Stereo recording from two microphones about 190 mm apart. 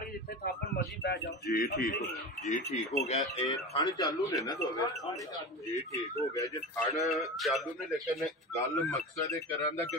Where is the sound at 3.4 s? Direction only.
20° left (ahead or behind).